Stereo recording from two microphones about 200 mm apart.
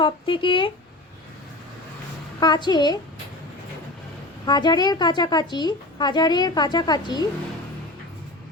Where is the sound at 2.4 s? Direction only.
20° left (ahead or behind).